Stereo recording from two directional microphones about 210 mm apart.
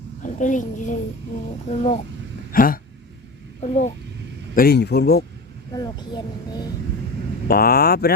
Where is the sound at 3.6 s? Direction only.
35° left (ahead or behind).